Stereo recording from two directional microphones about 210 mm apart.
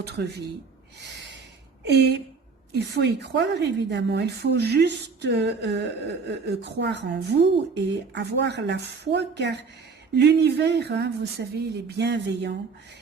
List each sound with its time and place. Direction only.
0.0 s speech: 50° right (ahead or behind)
1.9 s a woman's voice: 55° right (ahead or behind)